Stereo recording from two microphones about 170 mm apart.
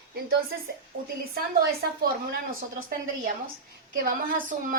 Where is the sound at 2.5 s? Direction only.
55° right (ahead or behind).